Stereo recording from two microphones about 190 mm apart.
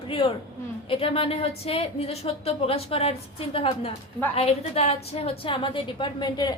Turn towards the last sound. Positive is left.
turn(degrees=20)  # may be behind; listen again after turning